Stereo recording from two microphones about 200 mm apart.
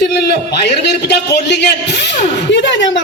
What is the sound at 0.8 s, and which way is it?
A man's voice, 60° left (ahead or behind).